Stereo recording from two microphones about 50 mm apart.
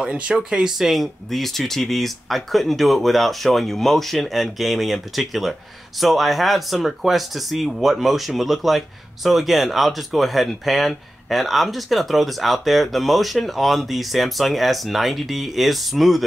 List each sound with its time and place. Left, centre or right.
0.0 s speech: centre
0.6 s speech: centre